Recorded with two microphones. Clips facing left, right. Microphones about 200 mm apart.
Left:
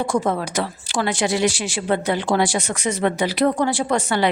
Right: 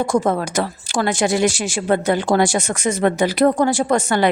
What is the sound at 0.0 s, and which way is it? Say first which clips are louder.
A woman's voice: right 3 dB; 45° right (ahead or behind).